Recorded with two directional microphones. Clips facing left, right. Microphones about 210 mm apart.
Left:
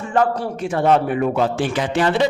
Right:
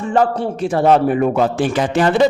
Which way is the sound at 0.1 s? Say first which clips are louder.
Right 2 dB; 30° right (ahead or behind).